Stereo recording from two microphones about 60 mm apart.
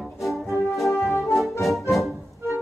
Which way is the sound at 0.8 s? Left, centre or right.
Left.